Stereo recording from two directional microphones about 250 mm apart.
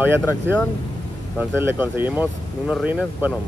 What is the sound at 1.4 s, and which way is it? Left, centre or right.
Speech, centre.